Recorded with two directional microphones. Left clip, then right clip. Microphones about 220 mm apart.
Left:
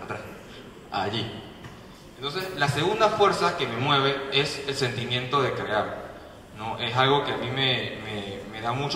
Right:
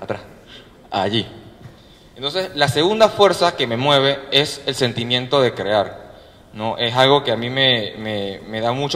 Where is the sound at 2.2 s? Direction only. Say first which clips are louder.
Right 8 dB; 30° right (ahead or behind).